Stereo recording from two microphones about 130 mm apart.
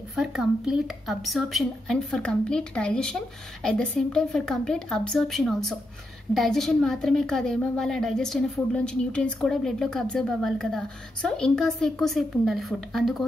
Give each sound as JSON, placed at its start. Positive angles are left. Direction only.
{"t": 0.1, "sound": "a woman's voice", "side_deg": -5}